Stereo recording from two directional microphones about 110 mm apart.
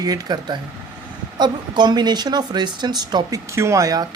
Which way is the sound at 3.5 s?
25° right (ahead or behind).